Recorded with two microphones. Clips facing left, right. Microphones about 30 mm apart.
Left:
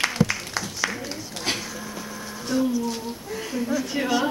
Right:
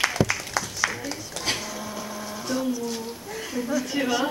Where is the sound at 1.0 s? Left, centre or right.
Centre.